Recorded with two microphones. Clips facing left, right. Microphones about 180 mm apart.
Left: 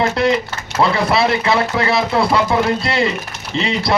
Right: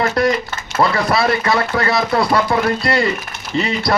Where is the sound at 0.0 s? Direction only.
25° left (ahead or behind).